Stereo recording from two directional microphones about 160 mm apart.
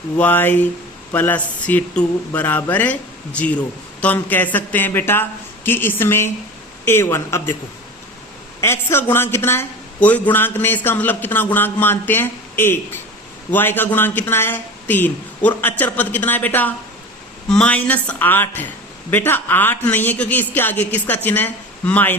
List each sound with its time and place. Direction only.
0.2 s speech: 10° left (ahead or behind)
8.6 s speech: 15° left (ahead or behind)